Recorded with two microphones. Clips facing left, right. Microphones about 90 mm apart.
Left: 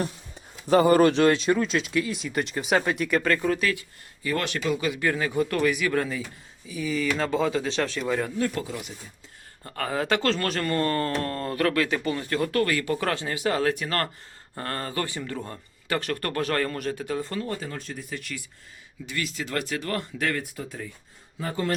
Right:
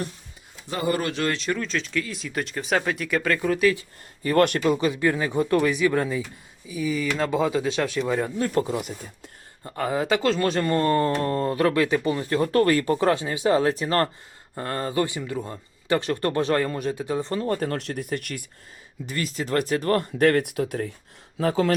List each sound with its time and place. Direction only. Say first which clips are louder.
0.7 s speech: left 8 dB; 40° left (ahead or behind)
1.1 s speech: left 5 dB; 20° left (ahead or behind); by 3.6 s centre (ahead or behind)
3.8 s speech: right 3 dB; 40° right (ahead or behind)
4.8 s speech: right 3 dB; 20° right (ahead or behind)
8.7 s speech: right 7 dB; 55° right (ahead or behind)
9.6 s speech: right 2 dB; 15° right (ahead or behind)
10.4 s speech: right 4 dB; 20° right (ahead or behind); by 13.0 s 35° right (ahead or behind)
13.0 s speech: right 5 dB; 20° right (ahead or behind)
14.5 s speech: right 4 dB; 10° right (ahead or behind); by 17.5 s 30° right (ahead or behind)
17.5 s speech: right 7 dB; 60° right (ahead or behind)
19.0 s speech: right 3 dB; 40° right (ahead or behind); by 20.9 s 65° right (ahead or behind)
21.3 s speech: right 7 dB; 90° right